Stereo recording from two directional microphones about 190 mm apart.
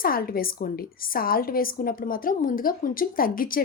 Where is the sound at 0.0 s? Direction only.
50° left (ahead or behind).